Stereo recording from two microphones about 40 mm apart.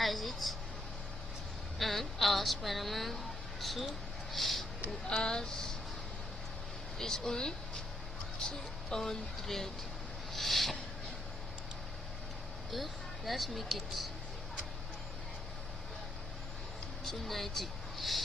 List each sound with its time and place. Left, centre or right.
0.0 s a sound: centre
1.8 s speech: centre
4.3 s a sound: centre
5.1 s speech: centre
7.0 s speech: centre
9.0 s speech: centre
10.3 s a sound: centre
12.7 s speech: centre
17.0 s speech: centre